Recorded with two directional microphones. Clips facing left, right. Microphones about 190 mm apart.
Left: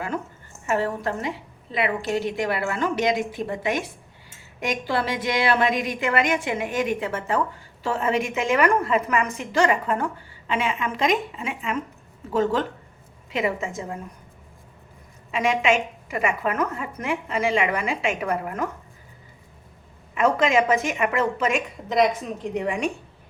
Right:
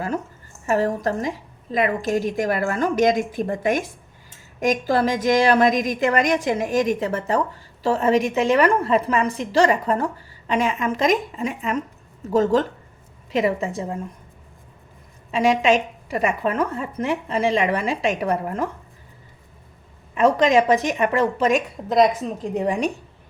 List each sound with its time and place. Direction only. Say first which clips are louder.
0.7 s a woman's voice: right 4 dB; 40° right (ahead or behind)
15.3 s a woman's voice: right 4 dB; 35° right (ahead or behind)
20.1 s a woman's voice: right 4 dB; 35° right (ahead or behind)